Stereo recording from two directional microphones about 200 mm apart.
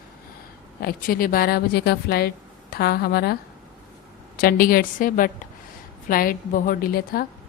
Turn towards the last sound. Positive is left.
turn(degrees=50)  # may be behind; listen again after turning